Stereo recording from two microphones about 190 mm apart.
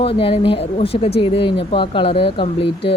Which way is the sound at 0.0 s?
30° left (ahead or behind).